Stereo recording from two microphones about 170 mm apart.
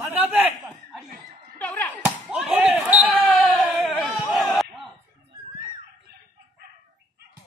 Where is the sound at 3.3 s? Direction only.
10° left (ahead or behind).